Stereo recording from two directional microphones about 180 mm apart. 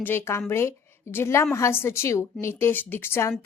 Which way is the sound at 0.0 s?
15° left (ahead or behind).